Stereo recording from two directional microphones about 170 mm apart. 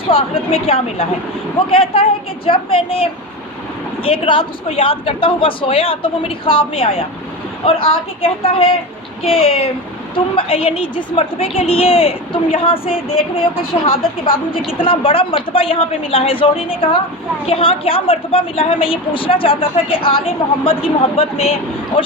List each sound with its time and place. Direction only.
0.1 s a woman's voice: 35° left (ahead or behind)